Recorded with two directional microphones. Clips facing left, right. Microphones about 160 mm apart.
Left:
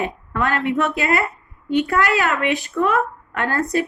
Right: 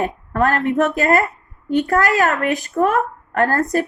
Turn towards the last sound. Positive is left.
turn(degrees=-45)  # may be behind; listen again after turning